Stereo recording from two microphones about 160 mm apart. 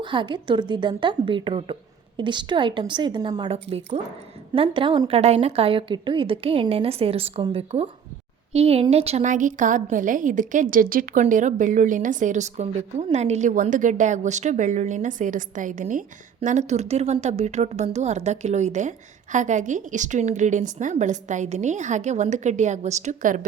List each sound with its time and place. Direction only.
0.0 s a woman's voice: 30° right (ahead or behind); by 23.5 s 55° right (ahead or behind)